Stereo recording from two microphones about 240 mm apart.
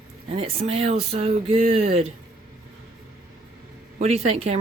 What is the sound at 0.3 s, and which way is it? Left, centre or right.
Speech, right.